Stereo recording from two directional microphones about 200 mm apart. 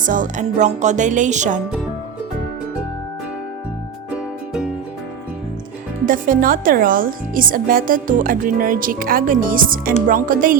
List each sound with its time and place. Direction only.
0.0 s music: 40° right (ahead or behind)
4.1 s music: 5° right (ahead or behind)
6.1 s speech: 45° right (ahead or behind)